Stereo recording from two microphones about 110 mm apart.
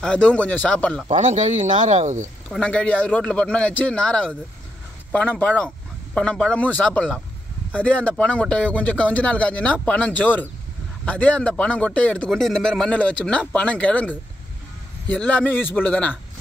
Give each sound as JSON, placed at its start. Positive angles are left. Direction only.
{"t": 0.0, "sound": "speech", "side_deg": 10}
{"t": 1.0, "sound": "speech", "side_deg": -90}
{"t": 2.5, "sound": "speech", "side_deg": 10}